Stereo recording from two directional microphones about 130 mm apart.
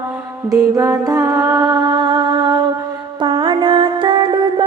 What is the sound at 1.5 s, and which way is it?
Mantra, 30° right (ahead or behind).